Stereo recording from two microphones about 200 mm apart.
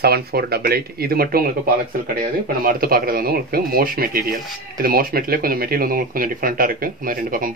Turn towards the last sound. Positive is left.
turn(degrees=-45)  # may be behind; listen again after turning